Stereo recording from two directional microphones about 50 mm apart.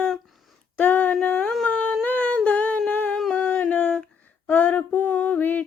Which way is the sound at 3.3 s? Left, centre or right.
Left.